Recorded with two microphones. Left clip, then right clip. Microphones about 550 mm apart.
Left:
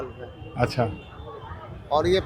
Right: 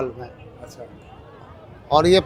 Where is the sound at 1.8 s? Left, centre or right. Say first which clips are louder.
Right 6 dB; right.